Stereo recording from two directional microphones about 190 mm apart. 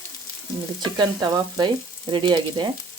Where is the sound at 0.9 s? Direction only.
20° right (ahead or behind).